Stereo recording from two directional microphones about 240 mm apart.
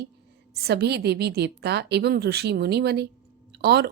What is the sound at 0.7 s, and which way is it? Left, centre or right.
A woman's voice, right.